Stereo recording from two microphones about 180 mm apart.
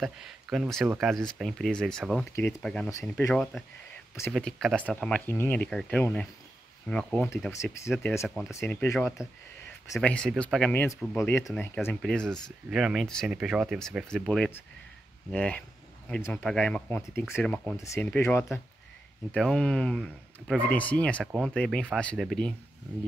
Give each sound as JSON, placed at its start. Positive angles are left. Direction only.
{"t": 0.0, "sound": "speech", "side_deg": 0}
{"t": 2.9, "sound": "speech", "side_deg": 15}
{"t": 4.3, "sound": "speech", "side_deg": 0}
{"t": 8.5, "sound": "speech", "side_deg": 10}